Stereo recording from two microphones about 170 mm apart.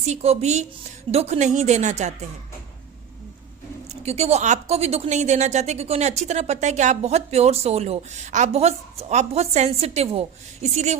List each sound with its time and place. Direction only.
0.0 s a woman's voice: 40° right (ahead or behind)
4.0 s a woman's voice: 40° right (ahead or behind)